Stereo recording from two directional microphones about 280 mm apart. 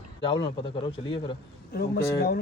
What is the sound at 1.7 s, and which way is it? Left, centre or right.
Speech, left.